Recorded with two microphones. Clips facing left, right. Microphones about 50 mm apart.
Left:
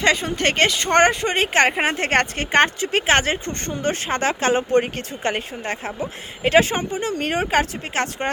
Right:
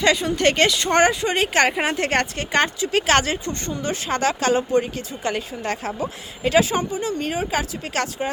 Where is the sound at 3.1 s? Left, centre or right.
Left.